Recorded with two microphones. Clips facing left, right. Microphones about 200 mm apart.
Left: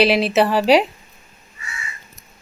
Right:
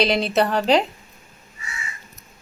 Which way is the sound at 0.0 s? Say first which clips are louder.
Left 4 dB; 5° left (ahead or behind).